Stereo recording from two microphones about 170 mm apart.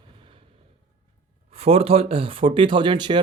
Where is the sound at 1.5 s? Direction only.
35° right (ahead or behind).